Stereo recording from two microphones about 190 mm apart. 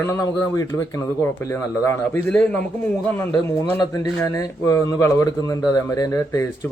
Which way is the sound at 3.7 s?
20° left (ahead or behind).